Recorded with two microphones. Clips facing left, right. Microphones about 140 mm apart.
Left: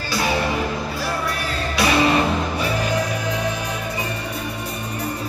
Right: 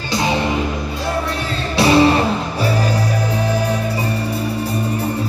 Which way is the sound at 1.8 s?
30° right (ahead or behind).